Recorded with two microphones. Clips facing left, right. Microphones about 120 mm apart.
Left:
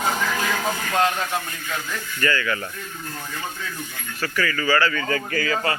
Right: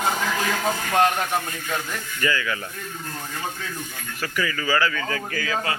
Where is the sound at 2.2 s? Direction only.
10° right (ahead or behind).